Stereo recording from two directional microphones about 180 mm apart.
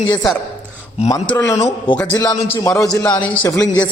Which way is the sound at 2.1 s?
20° left (ahead or behind).